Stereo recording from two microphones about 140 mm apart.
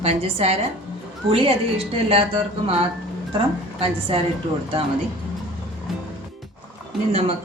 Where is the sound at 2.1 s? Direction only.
45° right (ahead or behind).